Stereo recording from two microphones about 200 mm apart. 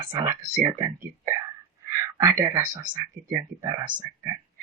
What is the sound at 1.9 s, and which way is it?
Speech, 15° right (ahead or behind).